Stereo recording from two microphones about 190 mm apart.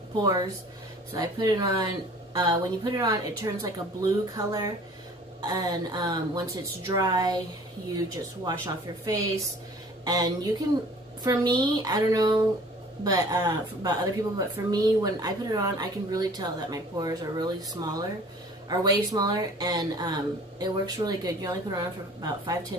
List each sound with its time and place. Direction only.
0.2 s speech: 20° right (ahead or behind)
8.5 s speech: 20° right (ahead or behind)